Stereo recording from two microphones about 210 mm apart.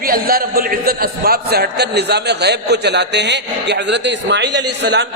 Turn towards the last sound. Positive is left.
turn(degrees=-55)  # may be behind; listen again after turning